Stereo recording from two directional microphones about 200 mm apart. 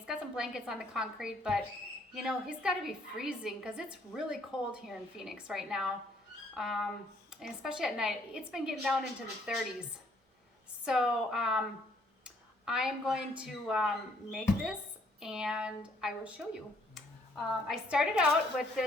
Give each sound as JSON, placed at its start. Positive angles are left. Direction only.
{"t": 0.0, "sound": "a woman's voice", "side_deg": -5}
{"t": 10.8, "sound": "a woman's voice", "side_deg": -5}
{"t": 17.7, "sound": "a woman's voice", "side_deg": -5}